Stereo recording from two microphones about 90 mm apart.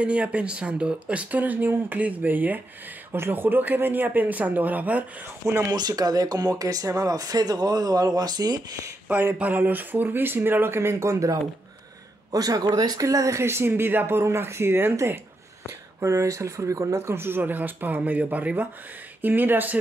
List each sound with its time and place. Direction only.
0.0 s speech: 15° right (ahead or behind)
5.4 s speech: 30° right (ahead or behind)
5.7 s speech: 45° right (ahead or behind)
9.1 s speech: 20° right (ahead or behind)